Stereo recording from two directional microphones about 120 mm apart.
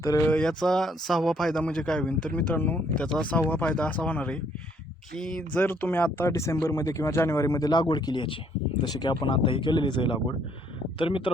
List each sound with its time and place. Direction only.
0.0 s speech: 25° left (ahead or behind)
0.3 s a man's voice: 5° left (ahead or behind); by 11.3 s 45° left (ahead or behind)